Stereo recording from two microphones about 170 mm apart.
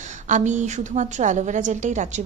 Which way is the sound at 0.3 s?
45° right (ahead or behind).